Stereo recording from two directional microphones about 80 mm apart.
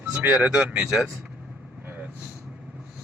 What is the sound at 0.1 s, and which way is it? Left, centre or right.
Speech, right.